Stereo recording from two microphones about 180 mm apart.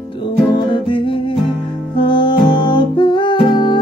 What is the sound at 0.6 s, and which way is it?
Music, 25° left (ahead or behind).